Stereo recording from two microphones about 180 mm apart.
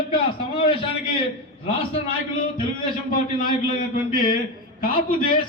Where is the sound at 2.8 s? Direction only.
50° left (ahead or behind).